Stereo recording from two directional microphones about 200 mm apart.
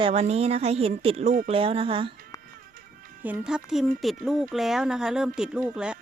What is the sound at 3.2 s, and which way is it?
Speech, 5° right (ahead or behind).